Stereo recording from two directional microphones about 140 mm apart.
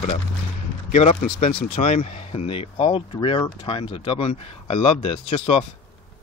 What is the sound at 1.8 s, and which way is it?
Speech, 55° left (ahead or behind).